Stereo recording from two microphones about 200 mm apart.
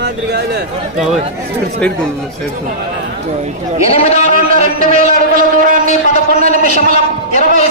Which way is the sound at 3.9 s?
30° left (ahead or behind).